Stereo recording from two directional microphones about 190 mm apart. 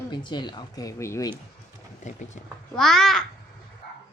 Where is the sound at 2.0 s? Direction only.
40° left (ahead or behind).